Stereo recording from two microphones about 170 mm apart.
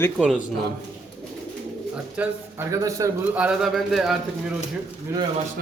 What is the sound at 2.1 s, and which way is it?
Speech, 10° right (ahead or behind).